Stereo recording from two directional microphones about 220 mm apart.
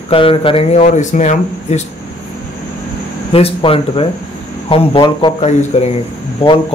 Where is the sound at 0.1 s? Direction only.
25° left (ahead or behind).